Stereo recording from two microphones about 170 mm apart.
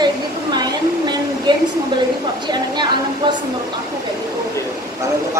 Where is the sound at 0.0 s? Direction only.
25° right (ahead or behind).